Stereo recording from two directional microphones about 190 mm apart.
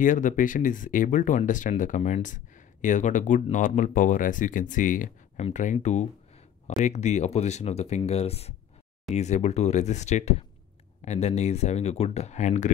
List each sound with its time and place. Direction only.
0.0 s speech: 40° left (ahead or behind)